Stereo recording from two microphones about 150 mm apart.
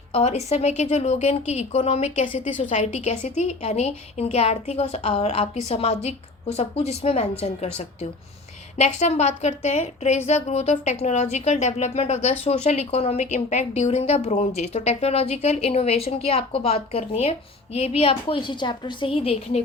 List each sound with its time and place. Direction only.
0.1 s a woman's voice: 45° left (ahead or behind)